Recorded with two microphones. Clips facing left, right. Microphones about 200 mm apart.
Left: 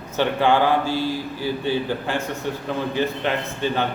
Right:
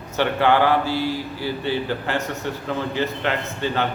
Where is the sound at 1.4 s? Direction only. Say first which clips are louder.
Left 2 dB; 15° left (ahead or behind).